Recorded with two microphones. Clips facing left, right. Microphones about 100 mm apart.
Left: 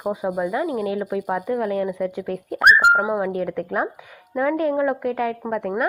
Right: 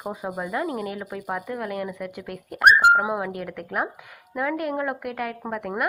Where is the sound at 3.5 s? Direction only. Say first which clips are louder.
Left 4 dB; 20° left (ahead or behind).